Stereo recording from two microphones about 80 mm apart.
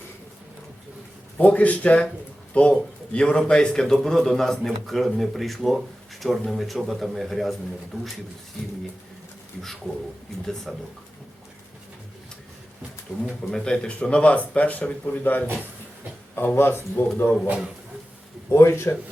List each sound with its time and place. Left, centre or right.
1.4 s a man's voice: centre
10.4 s a man's voice: centre
13.1 s speech: centre; by 17.1 s left
17.4 s a man's voice: centre
18.5 s speech: left